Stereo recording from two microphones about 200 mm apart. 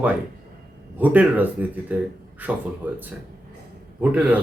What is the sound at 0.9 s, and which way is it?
Speech, 10° right (ahead or behind).